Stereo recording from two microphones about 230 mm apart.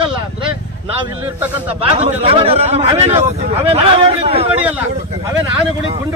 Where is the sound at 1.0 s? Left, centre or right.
Centre.